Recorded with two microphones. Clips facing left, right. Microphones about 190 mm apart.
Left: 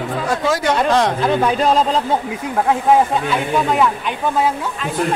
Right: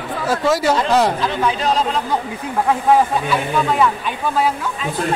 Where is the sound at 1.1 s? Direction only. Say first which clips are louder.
Left 3 dB; 50° left (ahead or behind).